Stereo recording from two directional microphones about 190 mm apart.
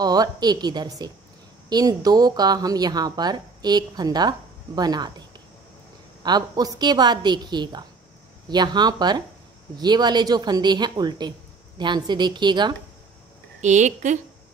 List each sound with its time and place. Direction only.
0.0 s a woman's voice: 20° right (ahead or behind)
6.2 s a woman's voice: 20° right (ahead or behind)
13.6 s a woman's voice: 40° right (ahead or behind)